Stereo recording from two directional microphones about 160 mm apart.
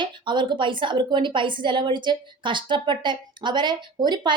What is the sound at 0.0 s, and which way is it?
A woman's voice, 30° right (ahead or behind).